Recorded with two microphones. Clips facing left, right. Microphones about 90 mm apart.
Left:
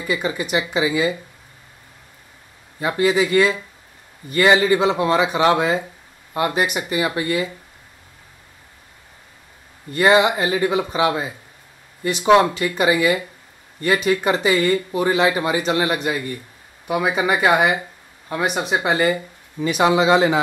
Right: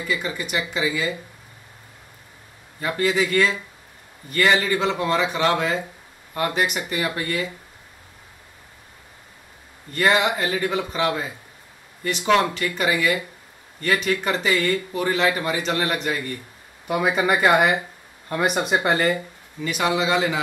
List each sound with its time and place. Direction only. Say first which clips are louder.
0.1 s speech: left 5 dB; 15° left (ahead or behind)
2.8 s speech: left 4 dB; 15° left (ahead or behind)
9.9 s speech: left 5 dB; 10° left (ahead or behind)
19.6 s speech: left 6 dB; 20° left (ahead or behind)